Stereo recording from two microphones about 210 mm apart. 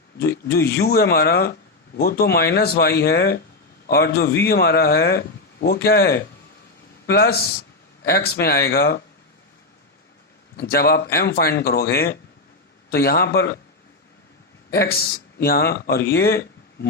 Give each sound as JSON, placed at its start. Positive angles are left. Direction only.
{"t": 0.5, "sound": "speech", "side_deg": 50}
{"t": 10.6, "sound": "speech", "side_deg": 50}
{"t": 14.7, "sound": "speech", "side_deg": 45}